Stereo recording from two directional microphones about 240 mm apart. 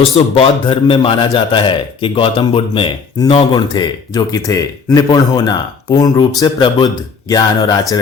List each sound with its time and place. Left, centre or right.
0.0 s a man's voice: left